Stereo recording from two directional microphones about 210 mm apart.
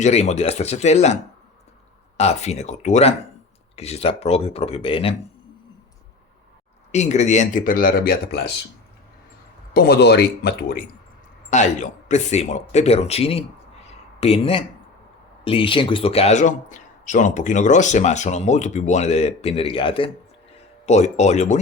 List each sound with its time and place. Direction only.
0.0 s speech: 30° left (ahead or behind)
6.9 s speech: 35° left (ahead or behind)
9.7 s speech: 50° left (ahead or behind)
11.5 s speech: 35° left (ahead or behind)